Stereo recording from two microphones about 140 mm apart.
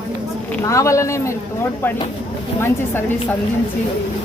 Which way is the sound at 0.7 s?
20° left (ahead or behind).